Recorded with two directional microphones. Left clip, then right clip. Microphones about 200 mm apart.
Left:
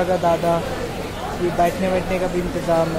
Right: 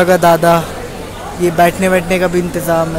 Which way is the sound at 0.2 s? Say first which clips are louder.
Right 9 dB; 30° right (ahead or behind).